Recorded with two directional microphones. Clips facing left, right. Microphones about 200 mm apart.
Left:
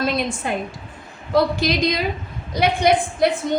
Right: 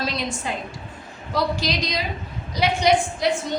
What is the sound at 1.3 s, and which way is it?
A woman's voice, 55° left (ahead or behind).